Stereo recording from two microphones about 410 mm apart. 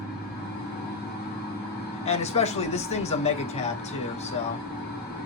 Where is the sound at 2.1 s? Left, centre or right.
Centre.